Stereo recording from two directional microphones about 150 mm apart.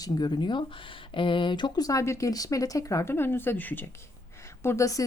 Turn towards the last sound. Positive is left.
turn(degrees=20)  # may be behind; listen again after turning